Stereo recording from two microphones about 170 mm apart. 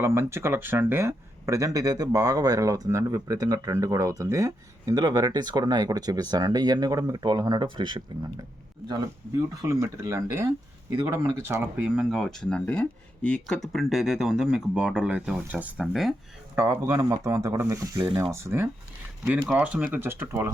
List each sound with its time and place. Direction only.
0.0 s speech: 15° right (ahead or behind)
16.6 s speech: 15° right (ahead or behind)